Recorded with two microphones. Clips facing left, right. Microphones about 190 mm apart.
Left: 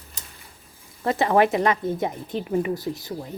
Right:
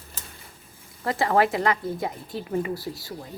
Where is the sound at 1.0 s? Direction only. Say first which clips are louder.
Left 3 dB; 20° left (ahead or behind).